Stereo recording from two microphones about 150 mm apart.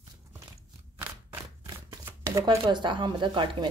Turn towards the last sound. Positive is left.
turn(degrees=-35)  # may be behind; listen again after turning